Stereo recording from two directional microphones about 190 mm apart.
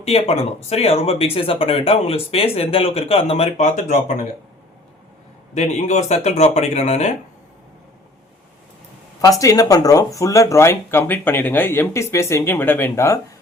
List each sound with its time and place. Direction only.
0.0 s speech: 30° left (ahead or behind)
5.5 s speech: 35° left (ahead or behind)
9.4 s speech: 20° left (ahead or behind)